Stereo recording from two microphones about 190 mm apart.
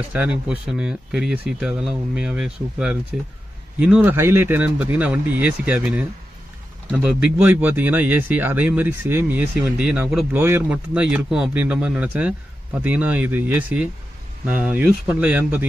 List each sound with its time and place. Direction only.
0.1 s speech: 5° right (ahead or behind)
7.2 s speech: 10° right (ahead or behind)